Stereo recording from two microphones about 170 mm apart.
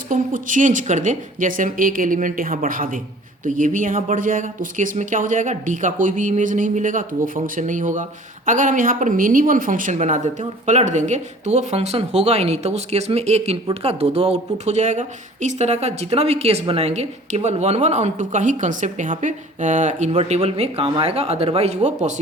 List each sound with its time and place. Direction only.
0.1 s speech: 50° right (ahead or behind)